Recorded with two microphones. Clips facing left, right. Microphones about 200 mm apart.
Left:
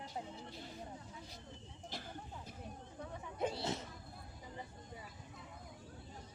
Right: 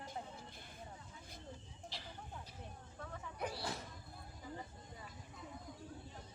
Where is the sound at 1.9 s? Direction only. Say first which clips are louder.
Left 6 dB; 50° left (ahead or behind).